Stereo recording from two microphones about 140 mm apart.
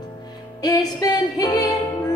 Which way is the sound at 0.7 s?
30° left (ahead or behind).